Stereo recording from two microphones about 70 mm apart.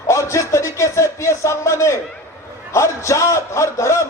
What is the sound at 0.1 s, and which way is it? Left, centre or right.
A man's voice, left.